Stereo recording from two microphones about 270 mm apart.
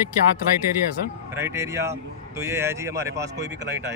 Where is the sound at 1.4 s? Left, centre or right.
Centre.